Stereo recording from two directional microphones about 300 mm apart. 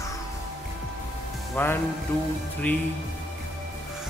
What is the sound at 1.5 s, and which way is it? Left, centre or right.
Speech, centre.